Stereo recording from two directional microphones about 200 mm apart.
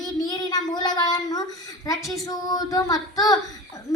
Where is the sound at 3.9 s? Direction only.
15° left (ahead or behind).